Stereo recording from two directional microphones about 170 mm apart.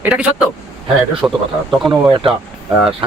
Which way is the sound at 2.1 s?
30° right (ahead or behind).